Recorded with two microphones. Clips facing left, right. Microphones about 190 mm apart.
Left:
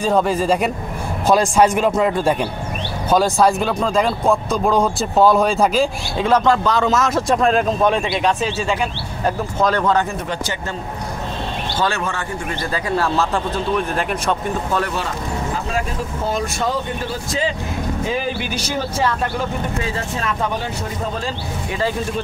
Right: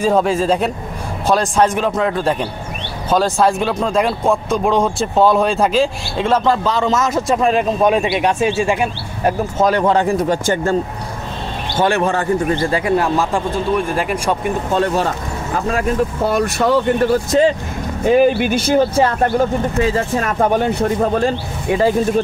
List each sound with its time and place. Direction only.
0.0 s speech: centre (ahead or behind)
9.8 s speech: 30° right (ahead or behind); by 10.8 s 50° right (ahead or behind)
12.0 s a man's voice: 35° right (ahead or behind); by 14.5 s 10° right (ahead or behind)
14.9 s speech: 40° right (ahead or behind)
16.3 s speech: 65° right (ahead or behind)